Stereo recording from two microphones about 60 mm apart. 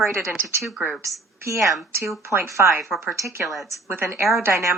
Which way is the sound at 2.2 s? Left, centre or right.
Right.